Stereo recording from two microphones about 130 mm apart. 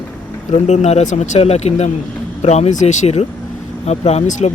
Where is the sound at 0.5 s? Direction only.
65° left (ahead or behind).